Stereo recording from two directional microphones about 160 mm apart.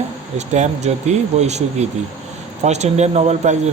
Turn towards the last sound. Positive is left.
turn(degrees=-45)  # may be behind; listen again after turning